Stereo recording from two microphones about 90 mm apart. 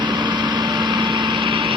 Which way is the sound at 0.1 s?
55° right (ahead or behind).